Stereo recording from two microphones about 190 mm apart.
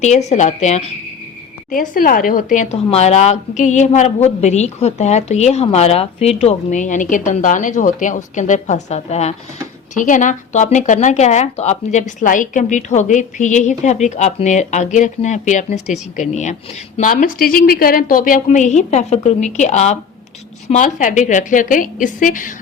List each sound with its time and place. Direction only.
0.0 s a woman's voice: 35° left (ahead or behind)